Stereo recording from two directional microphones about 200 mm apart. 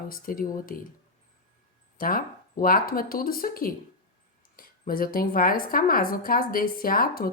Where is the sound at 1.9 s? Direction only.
45° left (ahead or behind).